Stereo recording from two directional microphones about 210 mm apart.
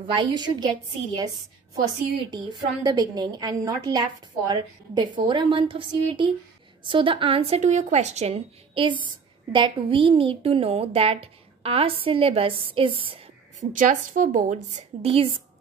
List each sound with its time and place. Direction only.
0.0 s speech: 20° right (ahead or behind)
2.3 s speech: 20° right (ahead or behind)
13.7 s a woman's voice: 40° right (ahead or behind)